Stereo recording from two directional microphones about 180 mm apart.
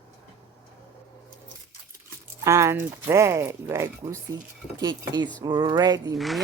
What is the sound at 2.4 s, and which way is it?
Speech, 15° right (ahead or behind).